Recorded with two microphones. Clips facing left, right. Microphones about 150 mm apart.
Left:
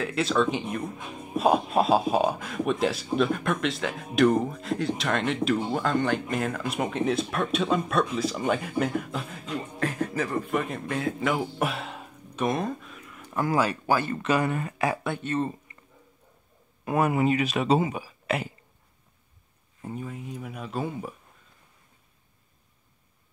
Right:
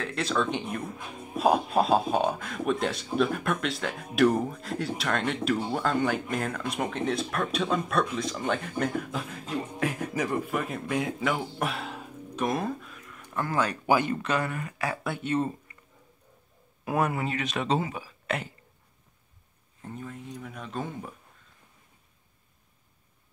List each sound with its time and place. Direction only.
0.0 s speech: centre (ahead or behind)
9.8 s speech: 10° right (ahead or behind)
10.5 s speech: centre (ahead or behind)
13.8 s speech: 15° right (ahead or behind)
14.4 s speech: 25° left (ahead or behind)
15.0 s speech: 10° right (ahead or behind)
16.8 s speech: centre (ahead or behind)
17.1 s speech: 15° left (ahead or behind)
17.7 s speech: 15° left (ahead or behind)
18.2 s a sound: 5° left (ahead or behind)
19.8 s speech: 10° left (ahead or behind)